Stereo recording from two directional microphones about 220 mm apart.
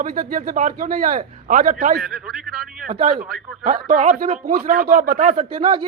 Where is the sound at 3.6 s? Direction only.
40° right (ahead or behind).